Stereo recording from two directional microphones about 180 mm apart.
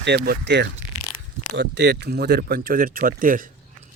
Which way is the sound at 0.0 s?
70° right (ahead or behind).